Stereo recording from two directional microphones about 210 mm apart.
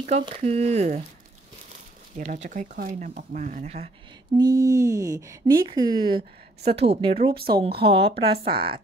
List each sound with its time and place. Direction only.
0.1 s speech: 30° right (ahead or behind)
2.1 s speech: 35° right (ahead or behind)
4.4 s speech: 15° right (ahead or behind)